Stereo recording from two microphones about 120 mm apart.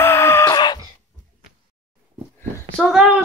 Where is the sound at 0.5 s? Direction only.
35° left (ahead or behind).